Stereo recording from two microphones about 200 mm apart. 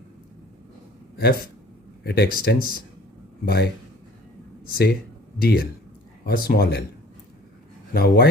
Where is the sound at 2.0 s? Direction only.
50° left (ahead or behind).